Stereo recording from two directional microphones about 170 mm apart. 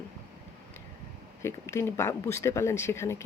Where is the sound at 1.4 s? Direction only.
15° left (ahead or behind).